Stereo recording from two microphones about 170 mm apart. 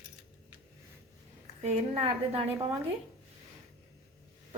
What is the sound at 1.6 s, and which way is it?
Speech, 35° right (ahead or behind).